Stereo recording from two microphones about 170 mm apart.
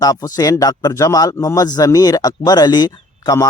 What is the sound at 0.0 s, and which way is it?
Speech, 20° left (ahead or behind).